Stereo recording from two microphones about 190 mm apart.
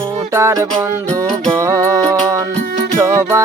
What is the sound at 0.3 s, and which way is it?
Music, 15° right (ahead or behind).